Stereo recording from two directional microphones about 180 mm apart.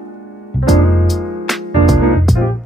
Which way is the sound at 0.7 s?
Centre (ahead or behind).